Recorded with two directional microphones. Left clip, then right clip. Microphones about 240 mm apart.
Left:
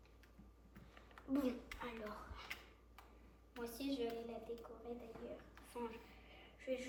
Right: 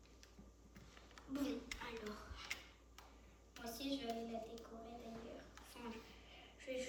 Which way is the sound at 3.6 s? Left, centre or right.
Left.